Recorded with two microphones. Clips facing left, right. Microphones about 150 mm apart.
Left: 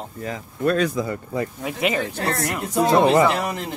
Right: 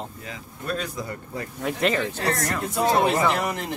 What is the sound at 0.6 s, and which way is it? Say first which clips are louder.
Speech: left 10 dB; 90° left.